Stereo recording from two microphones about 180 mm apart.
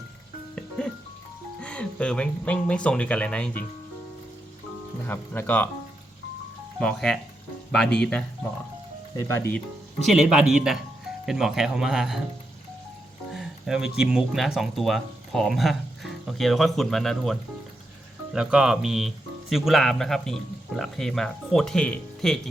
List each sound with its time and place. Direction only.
1.6 s speech: 5° left (ahead or behind)
5.0 s speech: 10° left (ahead or behind)
6.7 s speech: 5° left (ahead or behind)
9.1 s speech: 15° left (ahead or behind)
10.0 s speech: centre (ahead or behind)
13.3 s speech: 5° right (ahead or behind)
18.3 s speech: 5° right (ahead or behind)